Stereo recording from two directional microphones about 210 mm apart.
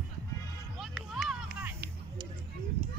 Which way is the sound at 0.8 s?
Centre (ahead or behind).